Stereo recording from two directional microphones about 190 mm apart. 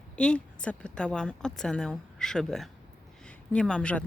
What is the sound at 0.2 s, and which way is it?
Speech, 5° left (ahead or behind).